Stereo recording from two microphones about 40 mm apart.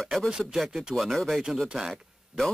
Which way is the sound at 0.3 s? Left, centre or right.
Right.